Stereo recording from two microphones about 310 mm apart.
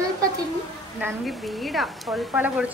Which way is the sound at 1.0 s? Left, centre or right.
Centre.